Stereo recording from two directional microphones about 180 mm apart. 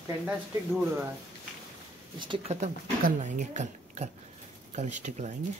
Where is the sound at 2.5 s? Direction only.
40° right (ahead or behind).